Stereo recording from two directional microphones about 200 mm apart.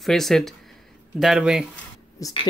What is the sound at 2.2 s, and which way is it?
Speech, 15° left (ahead or behind).